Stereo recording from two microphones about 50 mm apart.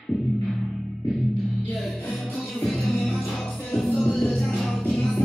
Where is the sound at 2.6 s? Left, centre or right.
Centre.